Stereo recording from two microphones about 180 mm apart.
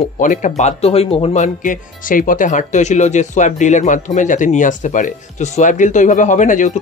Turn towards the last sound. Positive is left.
turn(degrees=45)  # may be behind; listen again after turning